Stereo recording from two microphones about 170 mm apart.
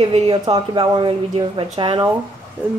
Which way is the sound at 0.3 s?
30° right (ahead or behind).